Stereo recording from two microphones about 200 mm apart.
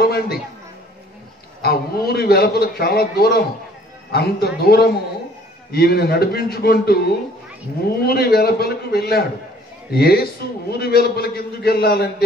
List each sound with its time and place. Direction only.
0.0 s a man's voice: 50° left (ahead or behind)
1.6 s a man's voice: 50° left (ahead or behind)